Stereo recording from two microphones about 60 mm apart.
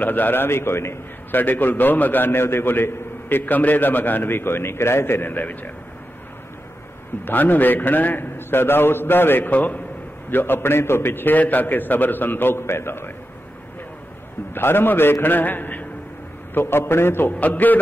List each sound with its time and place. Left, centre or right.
0.0 s a man's voice: left
1.3 s a man's voice: left
7.2 s a man's voice: left
14.5 s a man's voice: left
16.5 s a man's voice: left
17.4 s a man's voice: left